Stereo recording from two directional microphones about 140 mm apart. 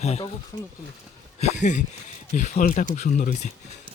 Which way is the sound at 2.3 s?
65° left (ahead or behind).